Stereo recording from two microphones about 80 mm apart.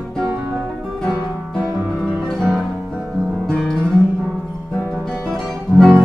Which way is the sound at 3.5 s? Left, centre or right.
Centre.